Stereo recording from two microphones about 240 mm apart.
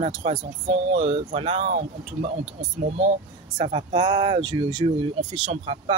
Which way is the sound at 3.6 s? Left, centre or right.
Right.